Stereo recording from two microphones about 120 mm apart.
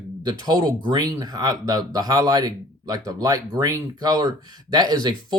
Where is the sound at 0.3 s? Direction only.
35° right (ahead or behind).